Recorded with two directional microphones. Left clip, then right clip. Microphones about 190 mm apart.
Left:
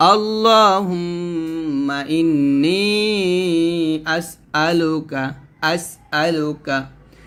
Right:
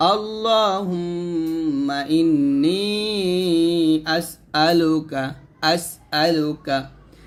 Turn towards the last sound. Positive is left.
turn(degrees=15)  # may be behind; listen again after turning